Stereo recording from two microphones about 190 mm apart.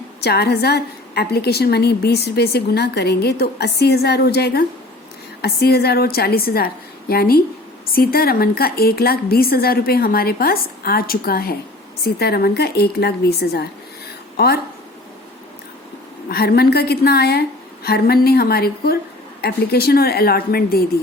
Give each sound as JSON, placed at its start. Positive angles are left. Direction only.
{"t": 0.2, "sound": "a woman's voice", "side_deg": 60}
{"t": 16.3, "sound": "a woman's voice", "side_deg": 55}